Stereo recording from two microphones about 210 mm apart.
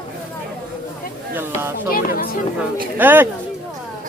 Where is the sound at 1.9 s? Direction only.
45° left (ahead or behind).